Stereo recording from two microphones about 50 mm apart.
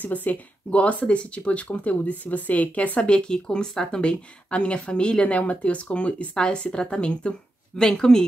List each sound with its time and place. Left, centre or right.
0.0 s speech: left; by 8.2 s centre